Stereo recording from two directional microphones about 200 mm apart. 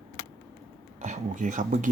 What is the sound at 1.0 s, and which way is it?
Speech, 35° right (ahead or behind).